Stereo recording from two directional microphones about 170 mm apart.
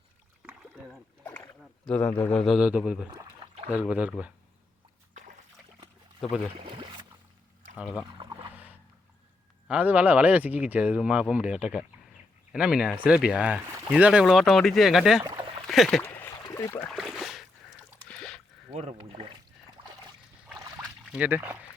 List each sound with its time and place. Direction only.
0.4 s rowboat: 5° right (ahead or behind)
1.9 s speech: 10° left (ahead or behind)
3.1 s a sound: 25° right (ahead or behind)
3.7 s speech: 10° right (ahead or behind)
6.6 s speech: 30° right (ahead or behind)
8.2 s boat: 25° right (ahead or behind)
8.5 s boat: 10° right (ahead or behind)
9.6 s speech: 10° right (ahead or behind)
15.2 s speech: 25° right (ahead or behind)
15.6 s speech: centre (ahead or behind)
16.4 s a sound: 15° left (ahead or behind)
16.9 s a sound: centre (ahead or behind)
18.7 s speech: 40° right (ahead or behind)
21.1 s speech: 10° right (ahead or behind)